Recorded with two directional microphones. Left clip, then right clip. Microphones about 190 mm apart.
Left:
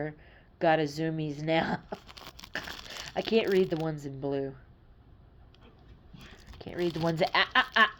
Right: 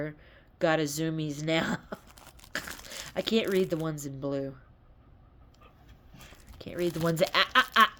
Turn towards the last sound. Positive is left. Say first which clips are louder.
# right 1 dB
turn(degrees=-20)  # may be behind; listen again after turning